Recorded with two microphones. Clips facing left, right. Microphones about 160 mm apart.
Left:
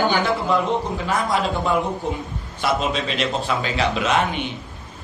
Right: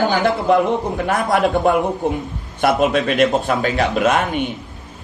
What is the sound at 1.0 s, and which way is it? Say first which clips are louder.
A man's voice: right 5 dB; 55° right (ahead or behind).